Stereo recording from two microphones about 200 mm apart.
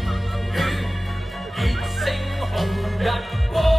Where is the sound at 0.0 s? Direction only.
Centre (ahead or behind).